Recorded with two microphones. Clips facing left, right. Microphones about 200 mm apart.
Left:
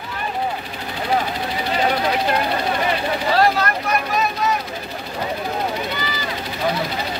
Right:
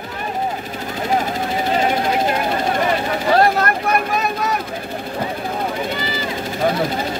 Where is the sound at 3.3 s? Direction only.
50° right (ahead or behind).